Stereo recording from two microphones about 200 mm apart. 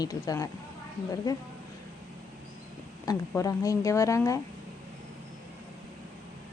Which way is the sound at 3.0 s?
15° left (ahead or behind).